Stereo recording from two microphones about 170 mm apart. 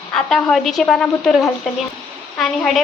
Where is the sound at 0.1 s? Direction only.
5° left (ahead or behind).